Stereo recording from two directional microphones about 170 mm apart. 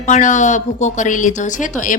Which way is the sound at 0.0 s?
45° left (ahead or behind).